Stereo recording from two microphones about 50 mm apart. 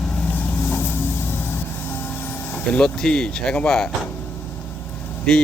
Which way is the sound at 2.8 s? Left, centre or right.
Centre.